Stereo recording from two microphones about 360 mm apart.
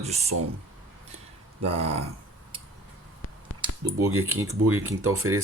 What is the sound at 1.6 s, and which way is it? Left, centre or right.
Speech, centre.